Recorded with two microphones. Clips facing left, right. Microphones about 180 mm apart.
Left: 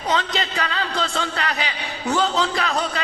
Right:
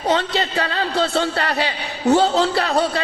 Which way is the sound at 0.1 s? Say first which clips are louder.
Right 3 dB; 35° right (ahead or behind).